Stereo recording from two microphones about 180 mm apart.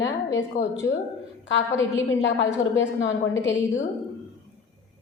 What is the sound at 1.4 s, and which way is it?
A woman's voice, 90° left.